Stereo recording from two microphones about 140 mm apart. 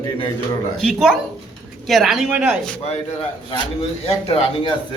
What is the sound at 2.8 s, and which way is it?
Speech, 45° left (ahead or behind).